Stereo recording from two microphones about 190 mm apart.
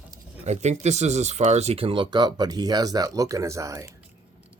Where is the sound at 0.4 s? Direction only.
35° right (ahead or behind); by 3.9 s 15° right (ahead or behind).